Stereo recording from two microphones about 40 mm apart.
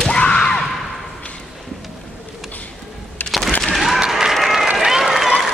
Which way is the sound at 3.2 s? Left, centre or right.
Left.